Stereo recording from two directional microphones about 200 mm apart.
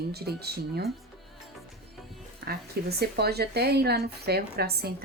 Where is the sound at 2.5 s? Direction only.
55° right (ahead or behind).